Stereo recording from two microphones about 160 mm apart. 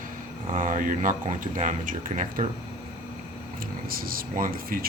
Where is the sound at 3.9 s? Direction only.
65° right (ahead or behind).